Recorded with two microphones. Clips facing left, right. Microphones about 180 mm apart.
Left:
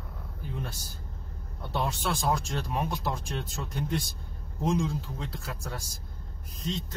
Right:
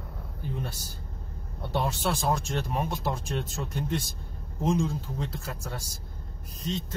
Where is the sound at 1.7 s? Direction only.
Centre (ahead or behind).